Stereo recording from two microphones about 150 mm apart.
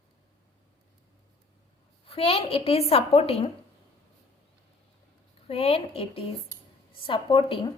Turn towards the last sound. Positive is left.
turn(degrees=35)  # may be behind; listen again after turning